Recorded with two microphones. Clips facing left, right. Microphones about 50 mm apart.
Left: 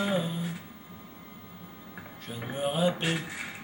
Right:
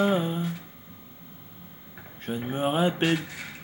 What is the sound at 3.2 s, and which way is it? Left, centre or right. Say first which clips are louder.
Speech: even; centre.